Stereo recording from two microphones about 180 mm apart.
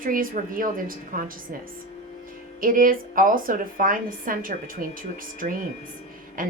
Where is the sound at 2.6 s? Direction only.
50° right (ahead or behind).